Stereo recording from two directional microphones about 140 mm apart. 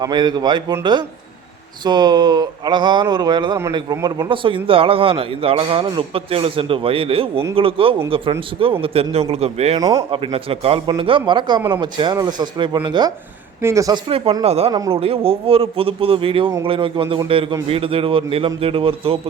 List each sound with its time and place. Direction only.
0.0 s speech: 30° right (ahead or behind)
13.6 s speech: 20° right (ahead or behind)
14.4 s speech: 50° right (ahead or behind)
14.7 s speech: 25° right (ahead or behind)
14.9 s speech: 40° right (ahead or behind)